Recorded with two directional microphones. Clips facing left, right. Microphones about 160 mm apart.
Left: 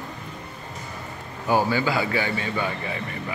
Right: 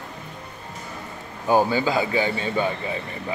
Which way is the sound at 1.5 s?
20° right (ahead or behind).